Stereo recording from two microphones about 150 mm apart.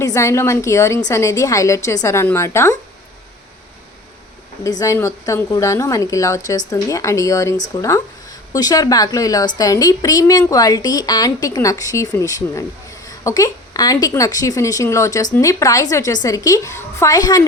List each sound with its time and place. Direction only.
0.0 s a woman's voice: 20° left (ahead or behind)
4.6 s a woman's voice: 20° left (ahead or behind)